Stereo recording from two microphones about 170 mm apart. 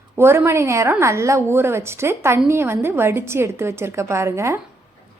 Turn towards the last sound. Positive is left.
turn(degrees=-15)  # may be behind; listen again after turning